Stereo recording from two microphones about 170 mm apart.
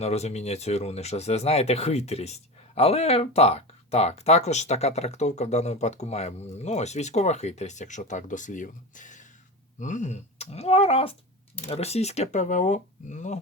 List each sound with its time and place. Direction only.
0.0 s speech: 40° left (ahead or behind)